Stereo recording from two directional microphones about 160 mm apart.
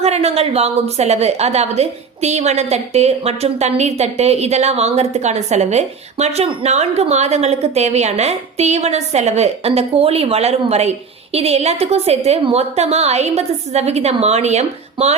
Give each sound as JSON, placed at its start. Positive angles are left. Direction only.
{"t": 0.0, "sound": "a woman's voice", "side_deg": -40}